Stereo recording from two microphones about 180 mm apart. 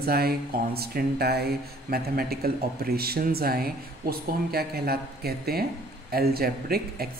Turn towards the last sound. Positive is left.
turn(degrees=-55)  # may be behind; listen again after turning